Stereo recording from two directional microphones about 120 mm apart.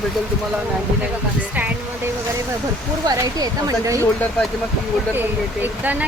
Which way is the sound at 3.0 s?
30° right (ahead or behind).